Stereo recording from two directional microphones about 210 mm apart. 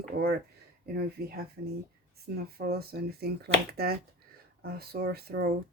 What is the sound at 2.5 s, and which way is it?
Speech, 45° right (ahead or behind).